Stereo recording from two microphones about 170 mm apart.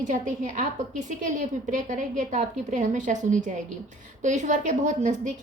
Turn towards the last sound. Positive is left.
turn(degrees=-45)  # may be behind; listen again after turning